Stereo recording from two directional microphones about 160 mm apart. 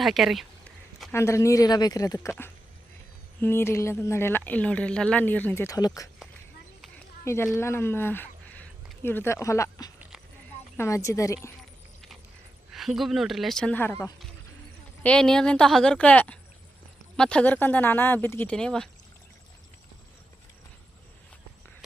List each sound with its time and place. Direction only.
0.0 s a woman's voice: centre (ahead or behind)
1.1 s speech: 15° left (ahead or behind)
3.4 s speech: 15° left (ahead or behind)
7.3 s speech: 15° left (ahead or behind)
12.7 s a woman's voice: centre (ahead or behind)